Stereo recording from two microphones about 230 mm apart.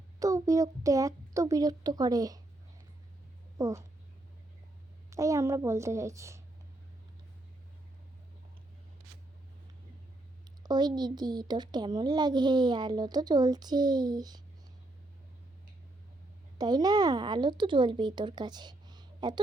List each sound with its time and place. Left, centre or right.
0.2 s speech: centre
3.6 s speech: centre
5.1 s speech: centre
10.6 s speech: centre
16.6 s speech: centre